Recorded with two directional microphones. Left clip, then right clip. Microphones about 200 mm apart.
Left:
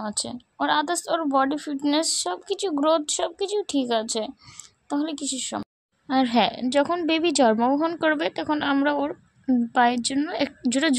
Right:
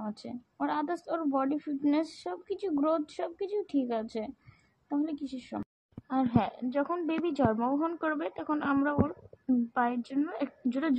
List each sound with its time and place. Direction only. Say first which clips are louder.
0.0 s a woman's voice: left 10 dB; 30° left (ahead or behind)
6.0 s a woman's voice: left 9 dB; 45° left (ahead or behind)